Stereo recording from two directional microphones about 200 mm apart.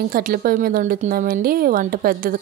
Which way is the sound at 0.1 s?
45° right (ahead or behind).